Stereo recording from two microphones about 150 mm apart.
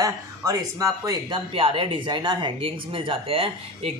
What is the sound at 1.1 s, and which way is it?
A man's voice, 35° right (ahead or behind).